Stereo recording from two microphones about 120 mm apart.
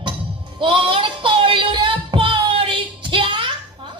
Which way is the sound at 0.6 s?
45° right (ahead or behind).